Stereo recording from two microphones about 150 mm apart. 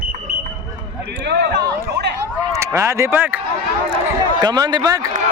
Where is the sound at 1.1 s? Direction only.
90° right.